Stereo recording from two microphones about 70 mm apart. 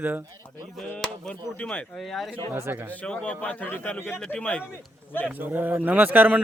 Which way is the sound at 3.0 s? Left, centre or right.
Centre.